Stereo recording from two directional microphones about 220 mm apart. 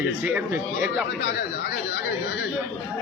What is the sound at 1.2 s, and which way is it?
Speech, 55° left (ahead or behind).